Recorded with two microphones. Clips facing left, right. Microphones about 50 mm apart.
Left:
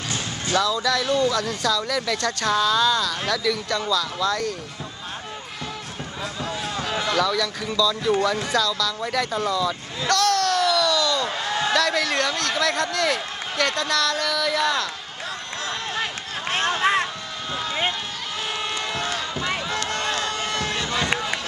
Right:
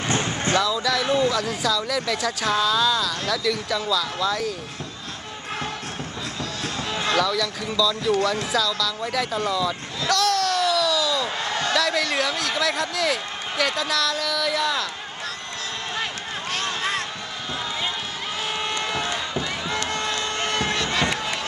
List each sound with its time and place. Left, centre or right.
0.0 s music: right
0.6 s speech: centre
7.2 s speech: centre
16.4 s a sound: left
18.6 s run: centre
19.0 s run: centre
20.3 s a sound: right